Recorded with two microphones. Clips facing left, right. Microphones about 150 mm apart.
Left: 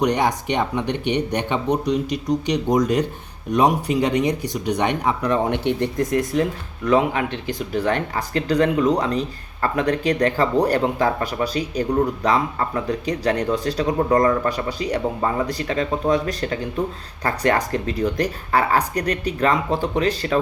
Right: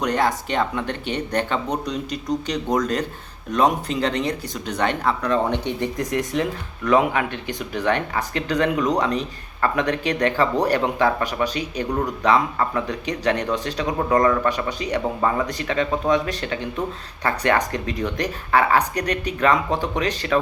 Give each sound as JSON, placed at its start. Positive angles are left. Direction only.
{"t": 0.0, "sound": "speech", "side_deg": 15}
{"t": 6.8, "sound": "speech", "side_deg": 25}
{"t": 7.4, "sound": "speech", "side_deg": 35}